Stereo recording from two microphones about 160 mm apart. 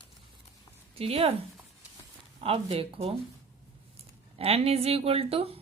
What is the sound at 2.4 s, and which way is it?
Speech, 35° right (ahead or behind).